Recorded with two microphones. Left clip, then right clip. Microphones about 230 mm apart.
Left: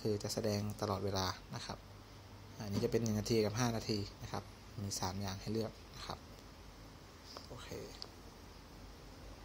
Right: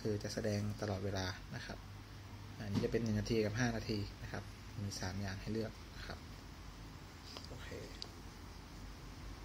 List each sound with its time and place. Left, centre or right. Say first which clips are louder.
0.0 s speech: left 2 dB; centre